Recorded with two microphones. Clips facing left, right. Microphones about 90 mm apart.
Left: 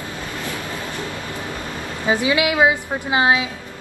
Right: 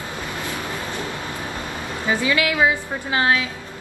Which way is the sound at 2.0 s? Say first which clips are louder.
Left 2 dB; 20° left (ahead or behind).